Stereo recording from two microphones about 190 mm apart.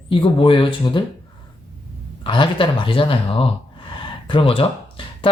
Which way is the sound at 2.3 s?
25° left (ahead or behind).